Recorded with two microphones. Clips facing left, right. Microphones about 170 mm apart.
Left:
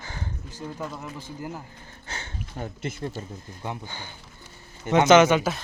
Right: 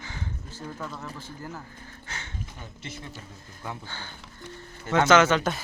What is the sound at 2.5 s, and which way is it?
Speech, 50° left (ahead or behind).